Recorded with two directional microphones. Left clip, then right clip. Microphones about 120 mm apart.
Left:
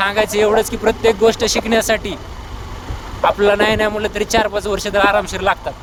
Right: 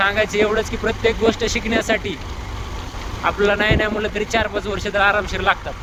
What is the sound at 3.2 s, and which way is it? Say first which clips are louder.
Speech: left 4 dB; 40° left (ahead or behind).